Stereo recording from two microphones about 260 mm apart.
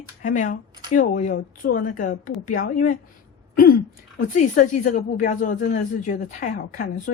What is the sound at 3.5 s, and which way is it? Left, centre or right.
Throat clearing, left.